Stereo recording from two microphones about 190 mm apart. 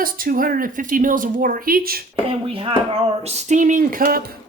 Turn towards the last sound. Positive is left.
turn(degrees=-45)  # may be behind; listen again after turning